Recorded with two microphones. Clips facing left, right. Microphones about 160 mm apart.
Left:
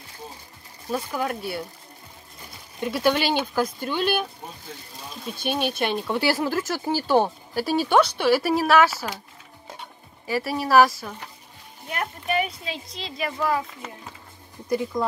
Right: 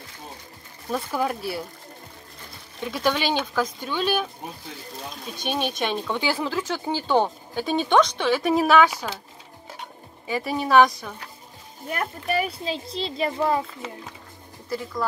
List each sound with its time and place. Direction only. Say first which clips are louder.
0.9 s speech: right 1 dB; centre (ahead or behind)
2.8 s speech: left 2 dB; 10° left (ahead or behind)
5.2 s speech: left 2 dB; 10° left (ahead or behind)
10.2 s speech: even; 5° left (ahead or behind)
11.9 s speech: right 1 dB; 35° right (ahead or behind)
14.7 s speech: left 4 dB; 20° left (ahead or behind)